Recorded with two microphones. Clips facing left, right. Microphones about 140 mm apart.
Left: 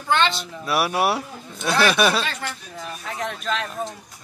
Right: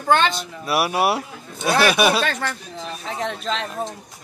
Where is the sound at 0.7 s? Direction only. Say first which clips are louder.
Right 1 dB; 5° right (ahead or behind).